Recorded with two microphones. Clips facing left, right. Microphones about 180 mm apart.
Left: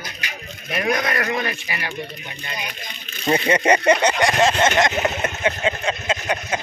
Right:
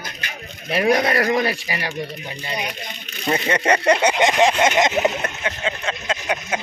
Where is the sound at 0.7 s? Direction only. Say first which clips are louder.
Right 4 dB; 30° right (ahead or behind).